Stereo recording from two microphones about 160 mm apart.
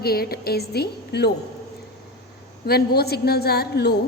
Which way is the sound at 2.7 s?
80° left.